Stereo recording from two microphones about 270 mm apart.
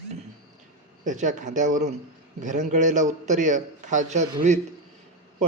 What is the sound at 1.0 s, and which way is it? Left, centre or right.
A man's voice, right.